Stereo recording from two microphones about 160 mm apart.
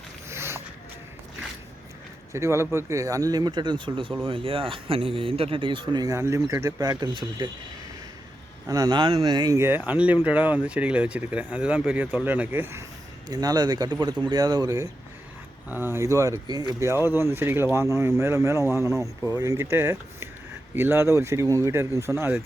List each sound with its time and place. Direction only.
0.3 s a sound: 15° right (ahead or behind)
2.3 s speech: 15° right (ahead or behind)
8.6 s speech: 20° right (ahead or behind)
13.2 s speech: 25° right (ahead or behind)